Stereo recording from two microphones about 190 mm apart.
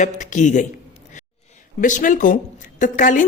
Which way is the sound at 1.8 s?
45° left (ahead or behind).